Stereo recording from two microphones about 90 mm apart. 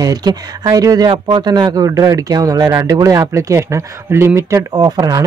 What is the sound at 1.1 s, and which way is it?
Speech, 60° right (ahead or behind).